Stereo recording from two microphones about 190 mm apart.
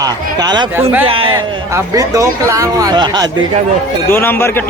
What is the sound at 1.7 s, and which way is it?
Speech, 20° right (ahead or behind).